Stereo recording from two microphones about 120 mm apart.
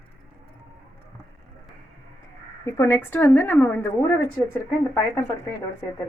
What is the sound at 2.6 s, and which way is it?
A woman's voice, 20° left (ahead or behind).